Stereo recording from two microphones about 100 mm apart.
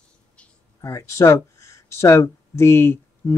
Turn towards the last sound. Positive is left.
turn(degrees=25)  # may be behind; listen again after turning